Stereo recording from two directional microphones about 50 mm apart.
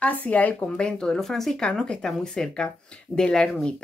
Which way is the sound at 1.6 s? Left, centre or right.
Centre.